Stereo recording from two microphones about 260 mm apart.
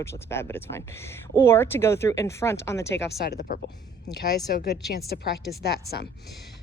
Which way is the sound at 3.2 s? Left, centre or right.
Left.